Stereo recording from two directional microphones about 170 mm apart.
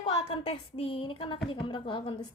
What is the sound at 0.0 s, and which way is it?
A woman's voice, 35° left (ahead or behind).